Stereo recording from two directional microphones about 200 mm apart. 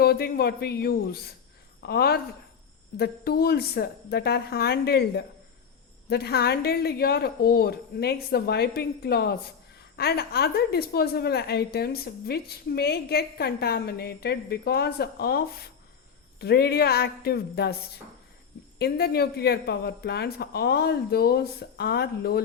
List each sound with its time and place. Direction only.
0.0 s a woman's voice: 50° left (ahead or behind)
18.8 s a woman's voice: 50° left (ahead or behind)